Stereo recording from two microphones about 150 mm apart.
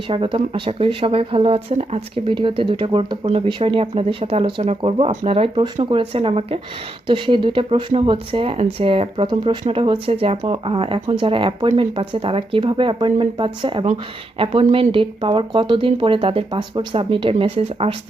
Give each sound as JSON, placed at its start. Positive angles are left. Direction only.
{"t": 0.1, "sound": "speech", "side_deg": -35}